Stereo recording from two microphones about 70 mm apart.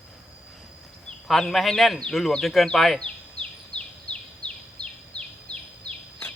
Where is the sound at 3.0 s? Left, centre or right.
Centre.